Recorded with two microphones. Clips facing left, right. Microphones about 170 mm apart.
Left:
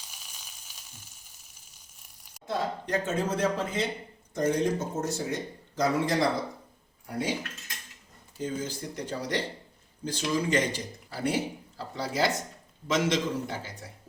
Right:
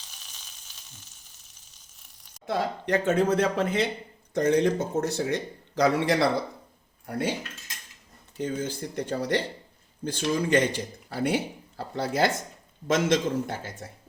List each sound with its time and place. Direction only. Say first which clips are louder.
0.1 s a sound: left 1 dB; 10° left (ahead or behind)
2.5 s a man's voice: right 4 dB; 70° right (ahead or behind)
8.4 s a man's voice: right 3 dB; 55° right (ahead or behind)